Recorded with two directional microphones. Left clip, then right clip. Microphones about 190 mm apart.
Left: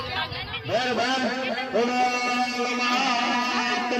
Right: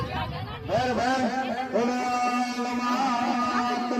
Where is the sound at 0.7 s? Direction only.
55° right (ahead or behind).